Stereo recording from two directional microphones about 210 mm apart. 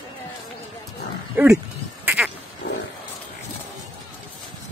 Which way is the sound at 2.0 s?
5° right (ahead or behind).